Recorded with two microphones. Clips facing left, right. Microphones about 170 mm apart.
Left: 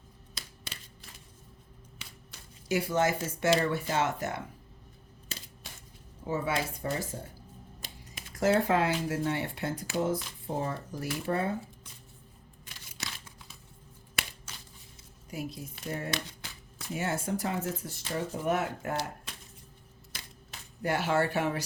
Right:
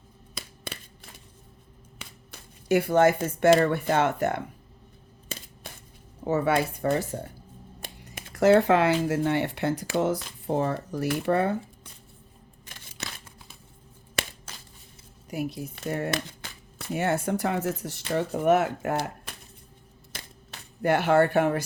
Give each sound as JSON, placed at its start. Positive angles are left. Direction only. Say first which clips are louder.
{"t": 0.3, "sound": "a sound", "louder": "right 7 dB", "side_deg": -55}
{"t": 2.0, "sound": "speech", "louder": "right 6 dB", "side_deg": -60}
{"t": 6.2, "sound": "speech", "louder": "right 7 dB", "side_deg": -65}
{"t": 13.0, "sound": "crumpling", "louder": "right 3 dB", "side_deg": -60}
{"t": 15.3, "sound": "speech", "louder": "right 7 dB", "side_deg": -65}
{"t": 20.1, "sound": "a sound", "louder": "right 4 dB", "side_deg": -60}